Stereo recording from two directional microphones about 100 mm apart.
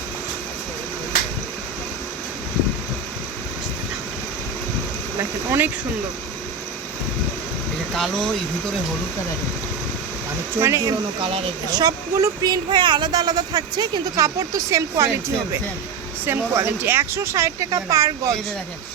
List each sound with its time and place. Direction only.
5.5 s speech: 20° right (ahead or behind)
7.9 s speech: 5° left (ahead or behind)
10.6 s speech: 30° right (ahead or behind)
11.2 s speech: 75° right (ahead or behind)
11.7 s speech: 40° right (ahead or behind)
16.2 s speech: 25° right (ahead or behind)